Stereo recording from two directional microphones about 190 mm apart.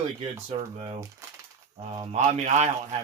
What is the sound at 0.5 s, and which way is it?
Speech, 30° right (ahead or behind).